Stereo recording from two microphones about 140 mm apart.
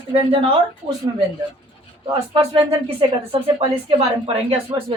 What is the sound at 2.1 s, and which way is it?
Speech, 35° right (ahead or behind).